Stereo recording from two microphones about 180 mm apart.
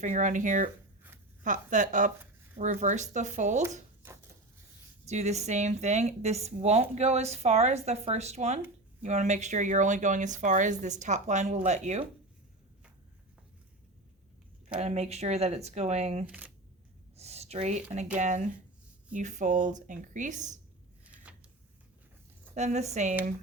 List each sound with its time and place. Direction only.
0.0 s speech: 45° right (ahead or behind)
5.0 s speech: 40° right (ahead or behind)
14.8 s speech: 35° right (ahead or behind)
16.2 s speech: 10° right (ahead or behind)
17.2 s speech: 35° right (ahead or behind)
21.0 s a sound: 5° right (ahead or behind)
22.5 s speech: 40° right (ahead or behind)